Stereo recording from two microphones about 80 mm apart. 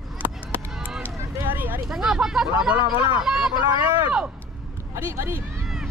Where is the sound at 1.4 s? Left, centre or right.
Right.